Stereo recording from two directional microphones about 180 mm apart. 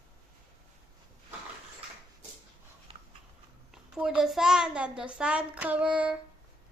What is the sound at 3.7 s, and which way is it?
A child's voice, 5° right (ahead or behind).